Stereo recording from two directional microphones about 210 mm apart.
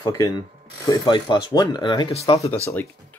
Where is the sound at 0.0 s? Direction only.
20° left (ahead or behind).